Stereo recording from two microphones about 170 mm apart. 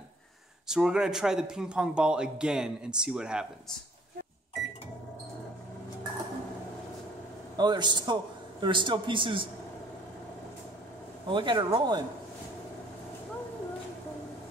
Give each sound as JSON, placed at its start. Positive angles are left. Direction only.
{"t": 0.7, "sound": "a man's voice", "side_deg": -5}
{"t": 7.5, "sound": "a man's voice", "side_deg": -25}
{"t": 11.2, "sound": "a man's voice", "side_deg": -30}